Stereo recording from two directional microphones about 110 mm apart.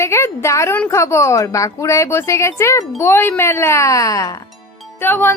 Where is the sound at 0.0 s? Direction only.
25° left (ahead or behind).